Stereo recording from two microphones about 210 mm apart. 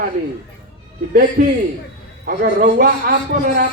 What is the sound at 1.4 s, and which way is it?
A man's voice, 45° right (ahead or behind).